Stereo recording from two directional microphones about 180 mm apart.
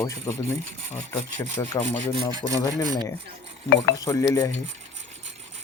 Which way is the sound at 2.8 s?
20° right (ahead or behind).